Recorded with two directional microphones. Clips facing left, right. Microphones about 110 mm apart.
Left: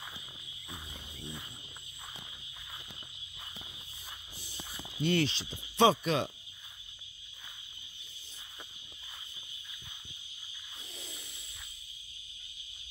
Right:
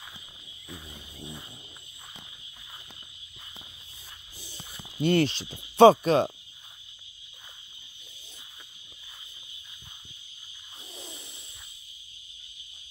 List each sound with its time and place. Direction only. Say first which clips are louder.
5.0 s cricket: right 6 dB; 50° right (ahead or behind)